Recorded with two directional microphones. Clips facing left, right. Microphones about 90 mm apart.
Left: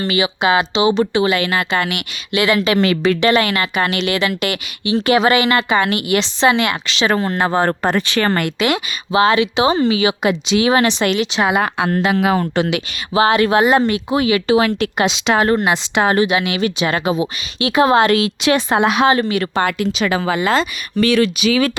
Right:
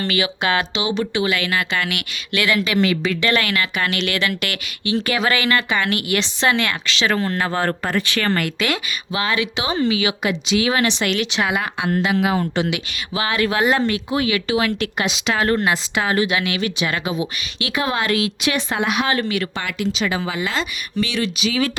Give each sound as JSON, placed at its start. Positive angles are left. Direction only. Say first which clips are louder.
{"t": 0.1, "sound": "a woman's voice", "louder": "left 6 dB", "side_deg": 20}
{"t": 9.2, "sound": "speech", "louder": "left 8 dB", "side_deg": 35}
{"t": 11.6, "sound": "speech", "louder": "left 4 dB", "side_deg": 50}
{"t": 13.1, "sound": "speech", "louder": "left 7 dB", "side_deg": 35}
{"t": 14.1, "sound": "a woman's voice", "louder": "left 9 dB", "side_deg": 25}
{"t": 16.0, "sound": "speech", "louder": "left 6 dB", "side_deg": 45}
{"t": 16.2, "sound": "speech", "louder": "left 4 dB", "side_deg": 20}